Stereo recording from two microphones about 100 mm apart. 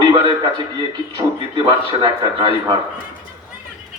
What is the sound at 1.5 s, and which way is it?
Speech, 45° right (ahead or behind).